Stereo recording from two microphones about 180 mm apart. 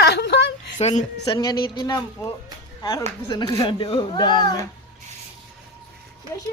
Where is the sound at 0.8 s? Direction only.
40° left (ahead or behind).